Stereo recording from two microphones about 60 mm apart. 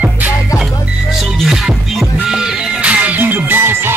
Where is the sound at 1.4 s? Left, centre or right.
Centre.